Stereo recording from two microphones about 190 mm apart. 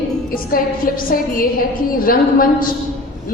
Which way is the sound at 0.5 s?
50° left (ahead or behind).